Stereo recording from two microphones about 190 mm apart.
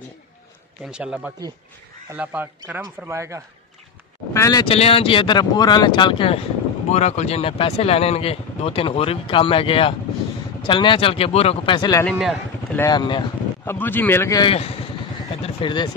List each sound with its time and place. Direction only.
0.8 s a man's voice: 5° right (ahead or behind)
4.3 s speech: 15° left (ahead or behind)
4.7 s speech: 30° left (ahead or behind)
12.0 s speech: centre (ahead or behind)
12.7 s speech: 20° left (ahead or behind)
13.7 s a man's voice: 10° left (ahead or behind)
14.5 s speech: 30° left (ahead or behind)